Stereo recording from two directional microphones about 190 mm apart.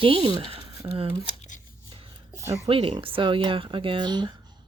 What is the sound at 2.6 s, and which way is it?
Speech, 30° right (ahead or behind).